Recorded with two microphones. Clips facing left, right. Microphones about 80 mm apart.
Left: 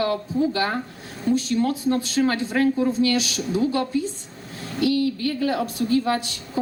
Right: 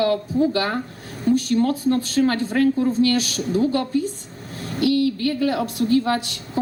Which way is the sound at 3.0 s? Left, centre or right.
Right.